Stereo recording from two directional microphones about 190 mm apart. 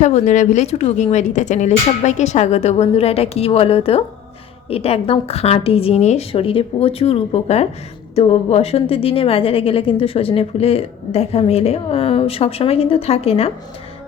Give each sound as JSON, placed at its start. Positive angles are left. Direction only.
{"t": 0.0, "sound": "a woman's voice", "side_deg": 40}